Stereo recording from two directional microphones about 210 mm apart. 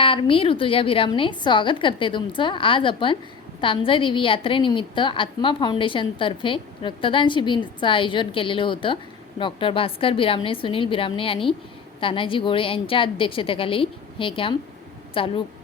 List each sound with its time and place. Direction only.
0.0 s a woman's voice: 25° left (ahead or behind)